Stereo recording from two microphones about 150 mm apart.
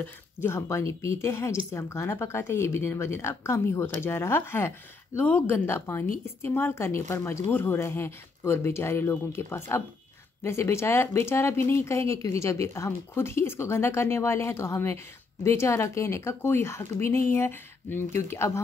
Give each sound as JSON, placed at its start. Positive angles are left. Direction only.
{"t": 0.0, "sound": "speech", "side_deg": 15}